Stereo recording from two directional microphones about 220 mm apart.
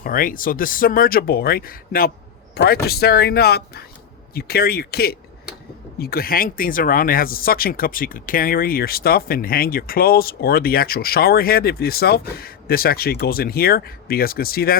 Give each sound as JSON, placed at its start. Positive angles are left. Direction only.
{"t": 0.0, "sound": "speech", "side_deg": 40}